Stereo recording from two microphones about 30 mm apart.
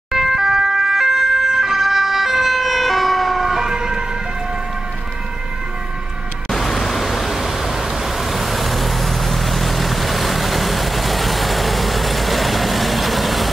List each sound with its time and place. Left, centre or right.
0.1 s ambulance: centre
3.4 s emergency vehicle: centre
6.5 s vehicle: centre